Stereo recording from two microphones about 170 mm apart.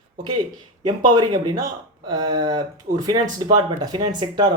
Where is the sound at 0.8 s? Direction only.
25° right (ahead or behind).